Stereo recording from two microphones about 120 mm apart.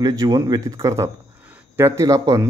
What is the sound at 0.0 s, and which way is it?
A man's voice, 30° right (ahead or behind).